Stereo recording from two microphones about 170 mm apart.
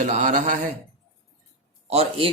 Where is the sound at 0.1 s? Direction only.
50° right (ahead or behind).